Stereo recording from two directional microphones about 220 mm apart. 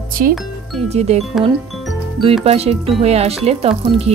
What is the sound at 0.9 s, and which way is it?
Speech, 30° right (ahead or behind).